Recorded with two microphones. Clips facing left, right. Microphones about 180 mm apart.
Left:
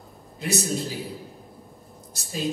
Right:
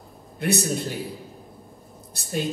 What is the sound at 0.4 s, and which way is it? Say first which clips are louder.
Speech: right 3 dB; 60° right (ahead or behind).